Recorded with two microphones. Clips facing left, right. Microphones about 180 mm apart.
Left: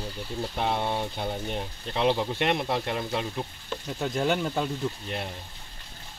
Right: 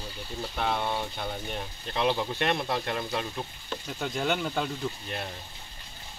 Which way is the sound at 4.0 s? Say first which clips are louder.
Left 3 dB; centre (ahead or behind).